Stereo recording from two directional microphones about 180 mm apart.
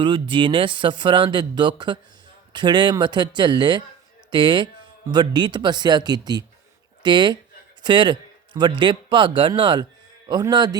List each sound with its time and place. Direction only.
0.0 s a man's voice: 25° right (ahead or behind)